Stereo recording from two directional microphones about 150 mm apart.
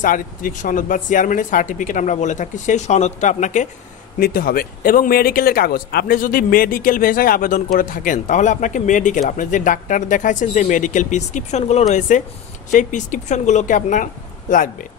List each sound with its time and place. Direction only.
0.0 s speech: 60° left (ahead or behind)
4.2 s speech: 75° left (ahead or behind)